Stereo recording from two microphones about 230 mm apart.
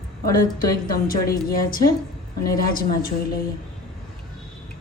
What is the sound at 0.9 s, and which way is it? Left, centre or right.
A woman's voice, left.